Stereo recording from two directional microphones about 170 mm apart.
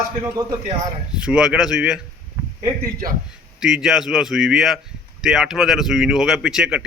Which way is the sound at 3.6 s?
5° right (ahead or behind).